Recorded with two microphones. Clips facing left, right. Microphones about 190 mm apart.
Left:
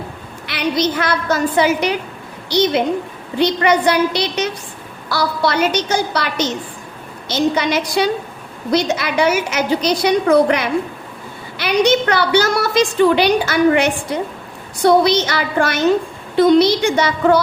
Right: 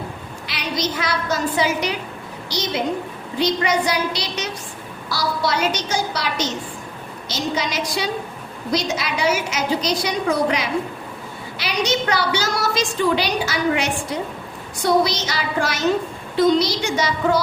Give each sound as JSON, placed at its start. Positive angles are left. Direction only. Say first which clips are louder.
{"t": 0.4, "sound": "a woman's voice", "louder": "left 7 dB", "side_deg": 55}